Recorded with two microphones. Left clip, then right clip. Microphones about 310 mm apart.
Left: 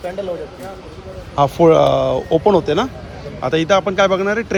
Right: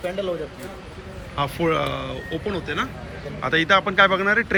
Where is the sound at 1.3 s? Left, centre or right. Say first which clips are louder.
Left 11 dB; centre.